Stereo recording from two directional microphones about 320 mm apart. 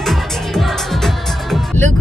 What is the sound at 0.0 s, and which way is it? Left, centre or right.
Music, centre.